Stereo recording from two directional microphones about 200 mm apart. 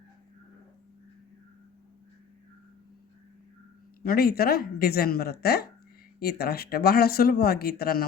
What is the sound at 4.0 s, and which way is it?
Speech, 50° left (ahead or behind).